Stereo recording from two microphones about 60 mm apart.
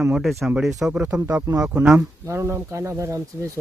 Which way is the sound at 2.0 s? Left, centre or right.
Right.